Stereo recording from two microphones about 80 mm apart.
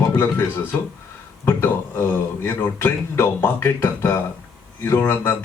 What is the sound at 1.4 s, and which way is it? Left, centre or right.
Speech, left.